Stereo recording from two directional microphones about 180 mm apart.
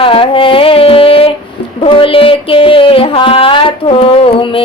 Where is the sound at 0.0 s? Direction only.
30° left (ahead or behind).